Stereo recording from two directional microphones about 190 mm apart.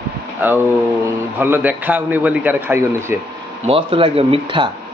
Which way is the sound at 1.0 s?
10° right (ahead or behind).